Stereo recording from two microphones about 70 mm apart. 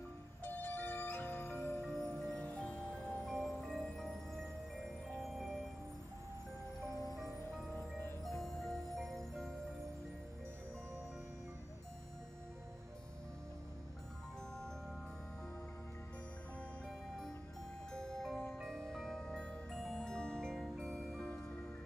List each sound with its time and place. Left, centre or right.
0.4 s music: left
1.8 s music: centre
3.3 s music: centre
8.3 s music: centre
17.9 s music: centre